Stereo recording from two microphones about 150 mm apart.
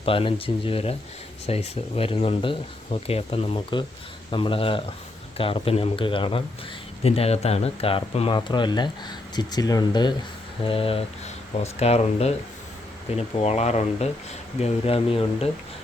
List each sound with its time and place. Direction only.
0.0 s speech: 40° left (ahead or behind)